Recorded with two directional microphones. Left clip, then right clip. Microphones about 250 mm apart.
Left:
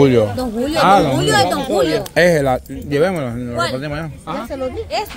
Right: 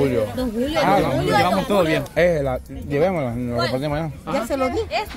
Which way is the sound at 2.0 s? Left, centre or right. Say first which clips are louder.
Left 5 dB; left.